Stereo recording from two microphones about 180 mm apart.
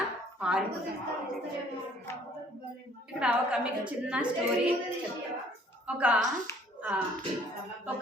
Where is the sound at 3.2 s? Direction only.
5° right (ahead or behind).